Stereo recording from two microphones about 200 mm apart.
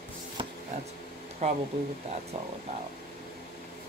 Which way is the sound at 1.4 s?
30° right (ahead or behind).